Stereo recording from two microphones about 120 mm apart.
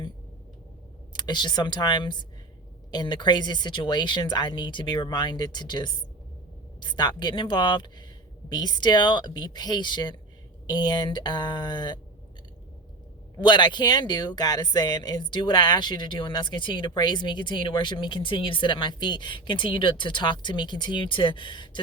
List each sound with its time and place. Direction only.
1.1 s speech: 40° left (ahead or behind)
13.4 s speech: 40° left (ahead or behind)